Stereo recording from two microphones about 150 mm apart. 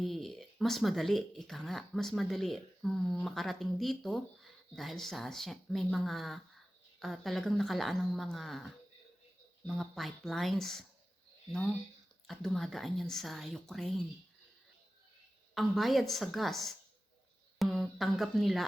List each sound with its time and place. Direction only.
0.0 s speech: centre (ahead or behind)
12.3 s speech: centre (ahead or behind)
15.5 s speech: centre (ahead or behind)